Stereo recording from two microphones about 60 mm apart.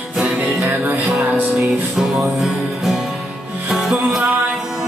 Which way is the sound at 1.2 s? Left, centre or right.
Right.